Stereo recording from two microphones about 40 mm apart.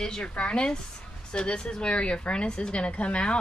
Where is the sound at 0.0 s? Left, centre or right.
Centre.